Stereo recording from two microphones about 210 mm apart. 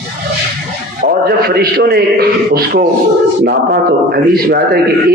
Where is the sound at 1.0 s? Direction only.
45° right (ahead or behind).